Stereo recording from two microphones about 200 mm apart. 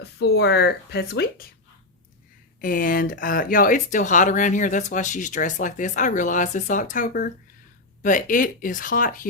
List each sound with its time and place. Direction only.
0.0 s speech: 55° left (ahead or behind)
2.6 s speech: 45° left (ahead or behind)